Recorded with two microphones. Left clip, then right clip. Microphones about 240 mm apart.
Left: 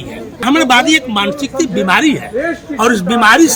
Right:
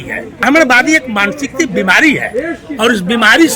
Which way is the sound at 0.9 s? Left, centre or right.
Right.